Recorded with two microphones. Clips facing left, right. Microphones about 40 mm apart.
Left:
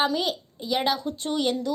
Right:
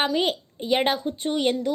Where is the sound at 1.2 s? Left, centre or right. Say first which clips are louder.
Right 2 dB; right.